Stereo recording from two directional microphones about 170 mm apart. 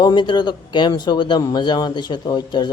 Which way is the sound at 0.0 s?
25° left (ahead or behind).